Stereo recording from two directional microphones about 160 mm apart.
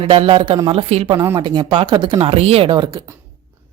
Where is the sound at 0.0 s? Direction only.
35° right (ahead or behind).